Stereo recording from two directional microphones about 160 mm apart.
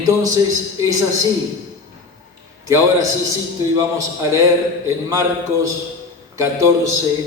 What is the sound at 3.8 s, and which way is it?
Speech, 20° right (ahead or behind).